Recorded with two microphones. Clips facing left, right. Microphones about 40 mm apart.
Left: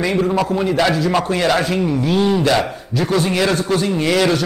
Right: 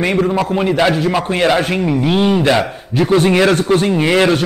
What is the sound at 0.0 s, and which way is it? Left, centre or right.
Speech, right.